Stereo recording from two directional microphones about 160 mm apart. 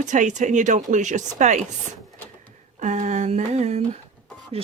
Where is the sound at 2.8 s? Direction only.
45° right (ahead or behind).